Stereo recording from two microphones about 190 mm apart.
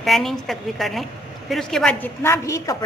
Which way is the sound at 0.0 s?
Centre (ahead or behind).